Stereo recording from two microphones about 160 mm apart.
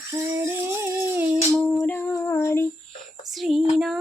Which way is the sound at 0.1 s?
15° right (ahead or behind).